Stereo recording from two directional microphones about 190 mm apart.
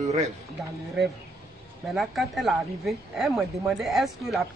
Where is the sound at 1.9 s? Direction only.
Centre (ahead or behind).